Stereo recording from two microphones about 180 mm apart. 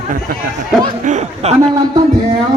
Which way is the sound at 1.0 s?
40° right (ahead or behind).